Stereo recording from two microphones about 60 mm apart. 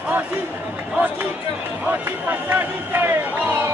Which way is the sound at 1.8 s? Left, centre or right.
Right.